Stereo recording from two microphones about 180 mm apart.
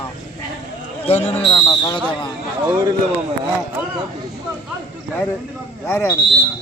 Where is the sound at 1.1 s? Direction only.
35° left (ahead or behind).